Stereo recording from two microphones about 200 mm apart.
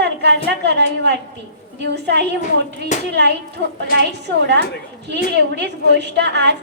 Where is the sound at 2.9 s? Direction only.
35° left (ahead or behind).